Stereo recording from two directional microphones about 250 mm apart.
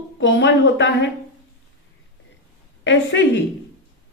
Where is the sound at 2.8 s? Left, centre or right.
Left.